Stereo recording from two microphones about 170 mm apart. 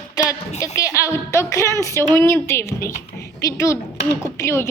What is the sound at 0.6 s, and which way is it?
A child's voice, 20° left (ahead or behind).